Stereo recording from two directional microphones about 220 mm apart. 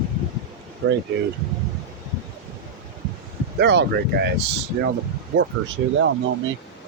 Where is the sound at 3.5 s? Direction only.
50° right (ahead or behind).